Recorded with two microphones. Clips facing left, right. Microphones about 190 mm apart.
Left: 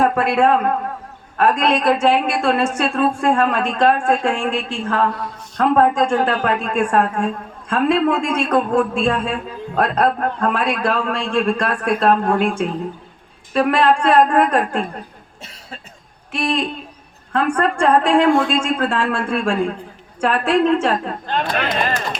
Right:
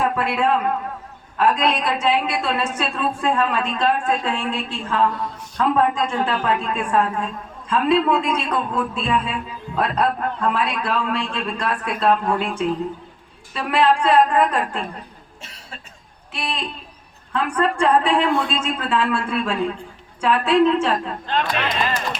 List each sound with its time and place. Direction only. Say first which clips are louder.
0.0 s a man's voice: left 5 dB; 50° left (ahead or behind)
3.5 s a woman's voice: left 3 dB; 70° left (ahead or behind)
4.1 s a man's voice: left 4 dB; 50° left (ahead or behind)
16.3 s a man's voice: left 8 dB; 50° left (ahead or behind)